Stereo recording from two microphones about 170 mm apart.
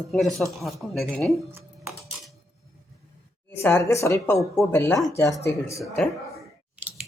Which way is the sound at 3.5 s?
15° left (ahead or behind).